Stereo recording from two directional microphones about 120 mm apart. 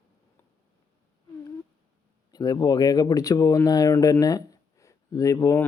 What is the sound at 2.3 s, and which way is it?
Speech, 30° left (ahead or behind).